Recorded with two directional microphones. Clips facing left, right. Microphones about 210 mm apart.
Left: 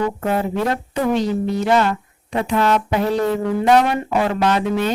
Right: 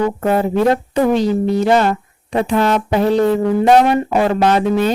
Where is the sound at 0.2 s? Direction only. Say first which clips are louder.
Right 5 dB; 40° right (ahead or behind).